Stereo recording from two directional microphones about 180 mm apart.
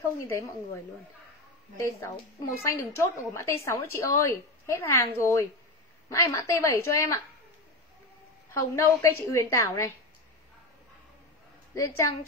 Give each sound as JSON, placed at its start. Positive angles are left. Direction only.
{"t": 0.2, "sound": "a woman's voice", "side_deg": 15}
{"t": 1.8, "sound": "a woman's voice", "side_deg": 15}
{"t": 8.5, "sound": "a woman's voice", "side_deg": 15}
{"t": 11.7, "sound": "a woman's voice", "side_deg": 15}